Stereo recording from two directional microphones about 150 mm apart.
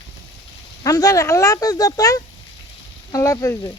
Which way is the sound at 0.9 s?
25° left (ahead or behind).